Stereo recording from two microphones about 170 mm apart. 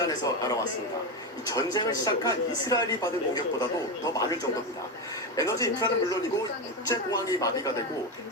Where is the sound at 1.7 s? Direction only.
25° left (ahead or behind).